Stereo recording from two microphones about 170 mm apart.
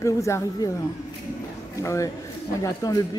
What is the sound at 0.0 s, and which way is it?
A man's voice, 20° left (ahead or behind).